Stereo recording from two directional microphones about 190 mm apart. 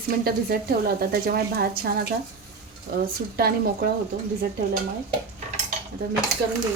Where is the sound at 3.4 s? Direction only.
55° right (ahead or behind).